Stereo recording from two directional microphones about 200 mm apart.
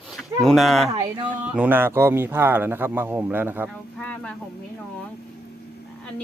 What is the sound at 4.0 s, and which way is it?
Speech, 5° left (ahead or behind).